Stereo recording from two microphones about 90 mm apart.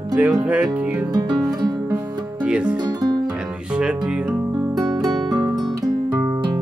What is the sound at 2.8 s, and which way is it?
Music, 50° right (ahead or behind).